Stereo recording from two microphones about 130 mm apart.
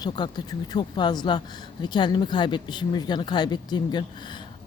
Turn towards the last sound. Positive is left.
turn(degrees=35)  # may be behind; listen again after turning